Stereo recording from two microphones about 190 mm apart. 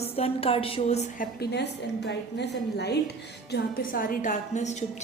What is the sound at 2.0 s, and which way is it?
Speech, 60° left (ahead or behind).